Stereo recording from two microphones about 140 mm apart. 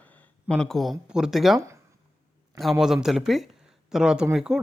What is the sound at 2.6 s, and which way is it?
Speech, centre (ahead or behind).